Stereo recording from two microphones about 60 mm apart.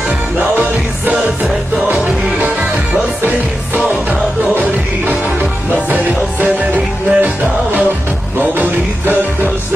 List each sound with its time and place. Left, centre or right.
0.4 s music: right